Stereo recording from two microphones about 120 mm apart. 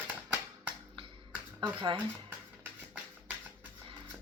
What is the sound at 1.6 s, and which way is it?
Speech, 40° right (ahead or behind).